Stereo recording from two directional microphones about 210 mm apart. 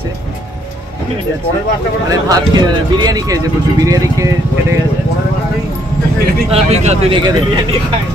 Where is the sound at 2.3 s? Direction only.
20° right (ahead or behind).